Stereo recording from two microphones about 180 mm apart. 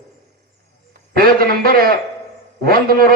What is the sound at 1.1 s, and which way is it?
Speech, 55° right (ahead or behind).